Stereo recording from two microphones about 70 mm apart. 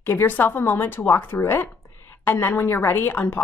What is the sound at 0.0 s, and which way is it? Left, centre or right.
Speech, left.